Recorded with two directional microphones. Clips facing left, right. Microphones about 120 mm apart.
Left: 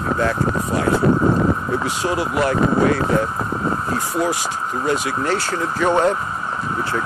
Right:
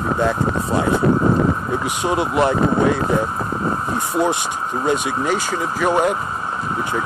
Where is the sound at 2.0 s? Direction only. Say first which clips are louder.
Right 3 dB; 25° right (ahead or behind).